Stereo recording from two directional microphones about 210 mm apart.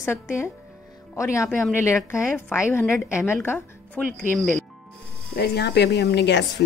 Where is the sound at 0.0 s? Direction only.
10° left (ahead or behind).